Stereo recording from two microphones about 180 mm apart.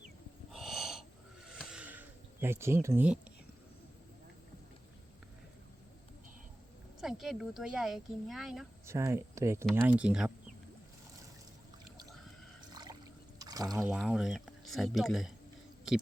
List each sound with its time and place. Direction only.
0.5 s wheeze: centre (ahead or behind)
1.5 s a sound: 5° right (ahead or behind)
7.0 s speech: centre (ahead or behind)
8.9 s speech: 15° right (ahead or behind)
12.7 s a sound: 25° right (ahead or behind)
13.7 s speech: 5° right (ahead or behind)